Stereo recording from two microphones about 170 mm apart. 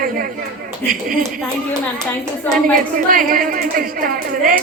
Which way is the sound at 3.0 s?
55° right (ahead or behind).